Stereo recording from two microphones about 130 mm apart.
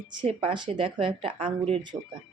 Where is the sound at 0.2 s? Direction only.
40° right (ahead or behind).